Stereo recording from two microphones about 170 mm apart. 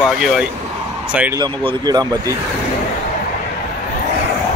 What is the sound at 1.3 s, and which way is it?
Speech, 25° right (ahead or behind).